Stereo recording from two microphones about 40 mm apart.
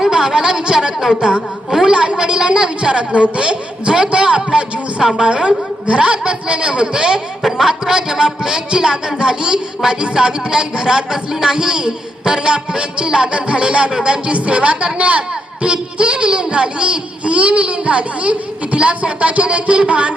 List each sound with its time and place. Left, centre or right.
0.0 s a woman's voice: centre
5.0 s a woman's voice: centre
5.3 s a man's voice: right